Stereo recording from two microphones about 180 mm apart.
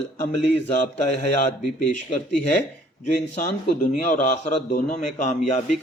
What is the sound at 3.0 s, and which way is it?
A man's voice, 45° left (ahead or behind).